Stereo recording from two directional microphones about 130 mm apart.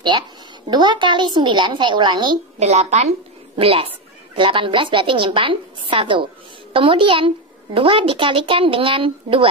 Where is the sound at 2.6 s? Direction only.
55° right (ahead or behind).